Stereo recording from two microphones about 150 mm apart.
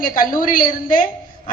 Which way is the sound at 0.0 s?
60° left (ahead or behind).